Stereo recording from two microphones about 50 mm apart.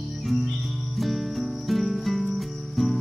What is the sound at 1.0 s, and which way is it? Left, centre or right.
Cricket, centre.